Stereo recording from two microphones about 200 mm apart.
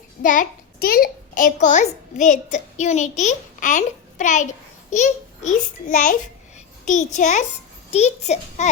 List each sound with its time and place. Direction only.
0.2 s a child's voice: 40° left (ahead or behind)